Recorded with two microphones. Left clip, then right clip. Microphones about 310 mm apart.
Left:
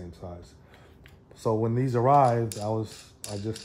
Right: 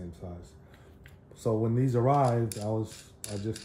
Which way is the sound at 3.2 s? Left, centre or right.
Centre.